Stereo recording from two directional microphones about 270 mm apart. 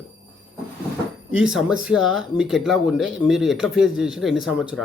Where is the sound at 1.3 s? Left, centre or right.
Centre.